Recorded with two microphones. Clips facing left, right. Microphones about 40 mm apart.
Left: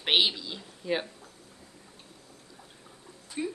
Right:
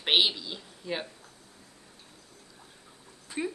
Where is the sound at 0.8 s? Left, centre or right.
Centre.